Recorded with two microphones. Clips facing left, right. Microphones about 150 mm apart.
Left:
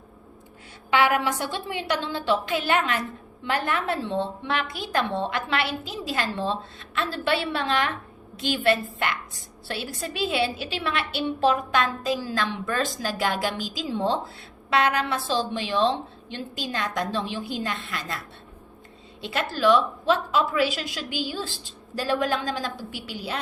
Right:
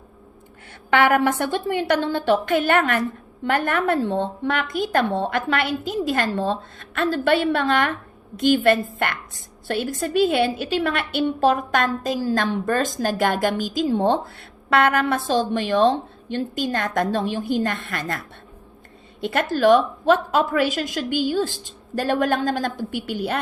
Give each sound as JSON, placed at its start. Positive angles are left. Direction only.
{"t": 0.9, "sound": "a woman's voice", "side_deg": -55}
{"t": 19.2, "sound": "a woman's voice", "side_deg": -50}